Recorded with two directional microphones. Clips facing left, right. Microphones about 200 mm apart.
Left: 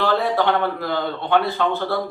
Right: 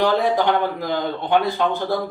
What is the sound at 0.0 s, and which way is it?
A man's voice, 15° right (ahead or behind).